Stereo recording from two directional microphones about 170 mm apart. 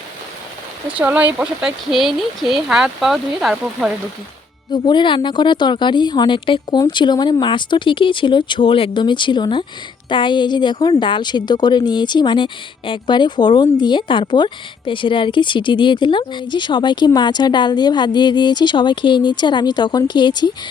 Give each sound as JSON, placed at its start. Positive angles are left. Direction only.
{"t": 0.9, "sound": "speech", "side_deg": -10}
{"t": 4.7, "sound": "a woman's voice", "side_deg": 25}